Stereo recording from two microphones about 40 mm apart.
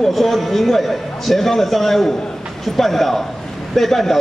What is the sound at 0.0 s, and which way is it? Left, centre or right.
A man's voice, centre.